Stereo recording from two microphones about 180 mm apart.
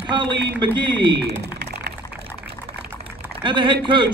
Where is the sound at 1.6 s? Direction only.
65° right (ahead or behind).